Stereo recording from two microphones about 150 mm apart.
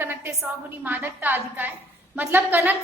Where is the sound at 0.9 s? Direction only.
10° right (ahead or behind).